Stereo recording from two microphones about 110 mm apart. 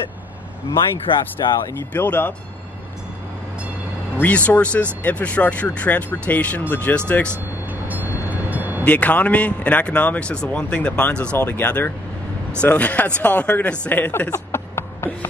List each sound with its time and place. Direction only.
1.0 s speech: 45° left (ahead or behind)
2.0 s speech: 20° left (ahead or behind)
4.2 s a man's voice: 15° left (ahead or behind)
7.9 s vehicle: 15° right (ahead or behind)
8.8 s a man's voice: 15° left (ahead or behind)
14.3 s a sound: 25° left (ahead or behind)